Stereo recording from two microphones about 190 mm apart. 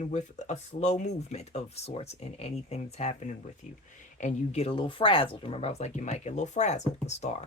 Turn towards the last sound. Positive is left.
turn(degrees=35)  # may be behind; listen again after turning